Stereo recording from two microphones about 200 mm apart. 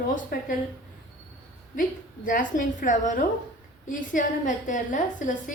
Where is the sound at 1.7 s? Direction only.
45° left (ahead or behind).